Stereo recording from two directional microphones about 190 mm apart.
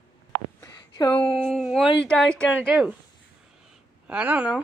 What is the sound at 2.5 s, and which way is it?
Speech, 5° right (ahead or behind).